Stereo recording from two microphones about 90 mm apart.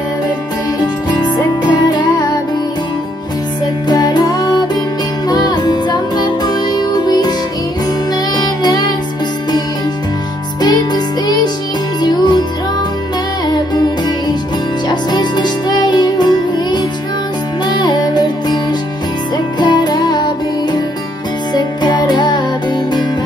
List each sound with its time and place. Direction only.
0.7 s music: 50° left (ahead or behind)
3.9 s music: 50° left (ahead or behind)
8.4 s child singing: 50° left (ahead or behind)
10.6 s music: 50° left (ahead or behind)
14.9 s music: 50° left (ahead or behind)